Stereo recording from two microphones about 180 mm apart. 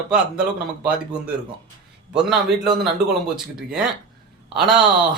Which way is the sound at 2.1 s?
5° right (ahead or behind).